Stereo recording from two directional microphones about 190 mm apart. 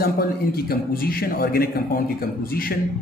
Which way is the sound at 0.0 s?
55° left (ahead or behind).